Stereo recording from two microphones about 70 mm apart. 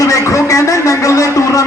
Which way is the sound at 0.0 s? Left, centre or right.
Left.